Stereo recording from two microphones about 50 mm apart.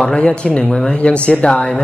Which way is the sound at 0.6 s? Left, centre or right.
Centre.